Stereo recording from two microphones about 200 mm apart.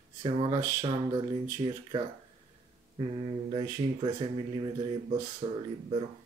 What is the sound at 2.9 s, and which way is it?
Speech, 25° right (ahead or behind).